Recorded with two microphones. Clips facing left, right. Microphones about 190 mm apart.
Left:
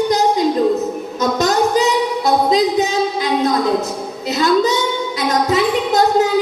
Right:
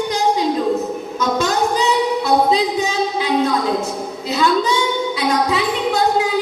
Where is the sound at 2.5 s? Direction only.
40° left (ahead or behind).